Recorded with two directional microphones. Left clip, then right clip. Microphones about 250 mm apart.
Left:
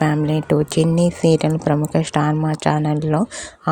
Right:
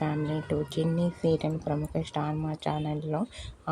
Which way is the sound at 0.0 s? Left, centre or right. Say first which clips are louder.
Left 12 dB; left.